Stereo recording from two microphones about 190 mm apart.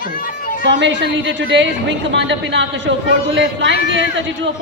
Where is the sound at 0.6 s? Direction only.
75° right (ahead or behind).